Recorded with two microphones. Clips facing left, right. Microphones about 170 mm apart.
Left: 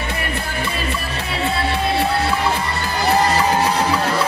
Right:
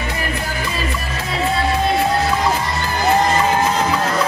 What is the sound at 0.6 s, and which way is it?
Music, 30° left (ahead or behind).